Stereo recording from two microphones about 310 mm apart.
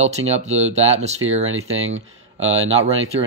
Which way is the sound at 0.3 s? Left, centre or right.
Right.